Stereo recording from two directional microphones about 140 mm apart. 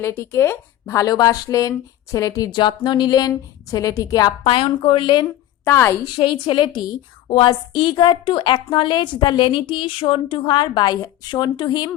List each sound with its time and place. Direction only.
0.0 s a woman's voice: 20° left (ahead or behind)
4.4 s a woman's voice: 40° left (ahead or behind)
5.6 s a woman's voice: 20° left (ahead or behind)
6.1 s a woman's voice: 35° left (ahead or behind)